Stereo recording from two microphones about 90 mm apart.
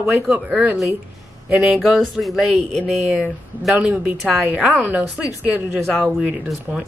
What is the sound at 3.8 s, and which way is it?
Speech, 15° right (ahead or behind).